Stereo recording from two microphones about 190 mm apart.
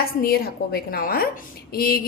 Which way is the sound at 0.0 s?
50° left (ahead or behind).